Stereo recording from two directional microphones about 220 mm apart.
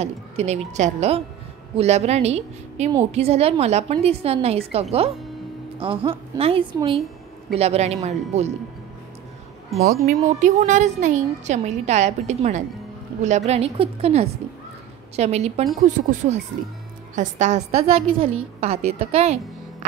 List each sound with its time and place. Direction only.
0.0 s a woman's voice: 30° right (ahead or behind)
9.8 s a woman's voice: 35° right (ahead or behind)